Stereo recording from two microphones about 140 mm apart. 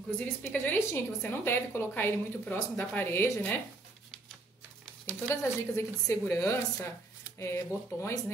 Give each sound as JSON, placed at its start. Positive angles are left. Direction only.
{"t": 0.2, "sound": "a woman's voice", "side_deg": 10}
{"t": 5.3, "sound": "a woman's voice", "side_deg": 20}